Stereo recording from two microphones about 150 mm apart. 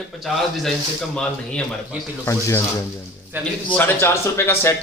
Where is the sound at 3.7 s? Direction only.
15° left (ahead or behind).